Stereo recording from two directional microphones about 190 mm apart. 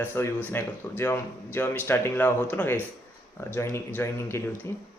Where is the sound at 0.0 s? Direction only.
10° left (ahead or behind).